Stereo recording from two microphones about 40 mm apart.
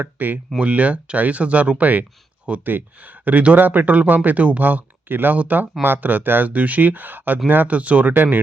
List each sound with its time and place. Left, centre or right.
0.0 s speech: right
0.6 s speech: right
1.8 s speech: right
5.4 s speech: right
6.5 s speech: right
7.7 s speech: right
8.1 s speech: right